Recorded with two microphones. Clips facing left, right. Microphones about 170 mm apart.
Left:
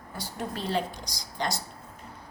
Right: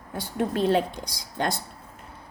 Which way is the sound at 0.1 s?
60° right (ahead or behind).